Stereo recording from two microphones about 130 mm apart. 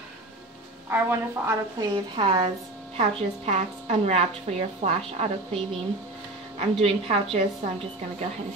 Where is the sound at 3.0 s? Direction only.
50° right (ahead or behind).